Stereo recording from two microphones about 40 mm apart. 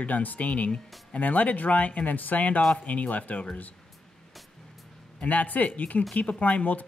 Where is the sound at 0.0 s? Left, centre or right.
Left.